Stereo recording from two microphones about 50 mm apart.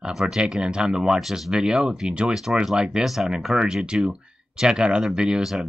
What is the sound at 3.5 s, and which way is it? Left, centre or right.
Speech, centre.